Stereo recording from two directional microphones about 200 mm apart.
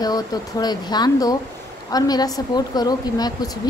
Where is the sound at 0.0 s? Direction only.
20° left (ahead or behind).